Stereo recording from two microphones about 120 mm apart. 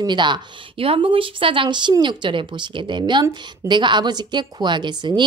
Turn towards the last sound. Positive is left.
turn(degrees=-40)  # may be behind; listen again after turning